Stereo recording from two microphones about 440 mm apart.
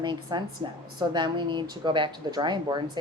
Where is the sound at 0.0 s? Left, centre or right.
Centre.